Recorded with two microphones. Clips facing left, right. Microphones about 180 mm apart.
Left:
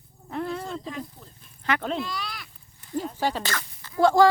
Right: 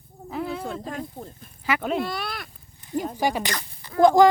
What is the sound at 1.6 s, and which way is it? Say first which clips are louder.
Speech: right 2 dB; 5° right (ahead or behind).